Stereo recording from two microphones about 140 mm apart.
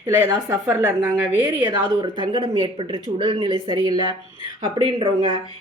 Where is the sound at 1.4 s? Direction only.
30° right (ahead or behind).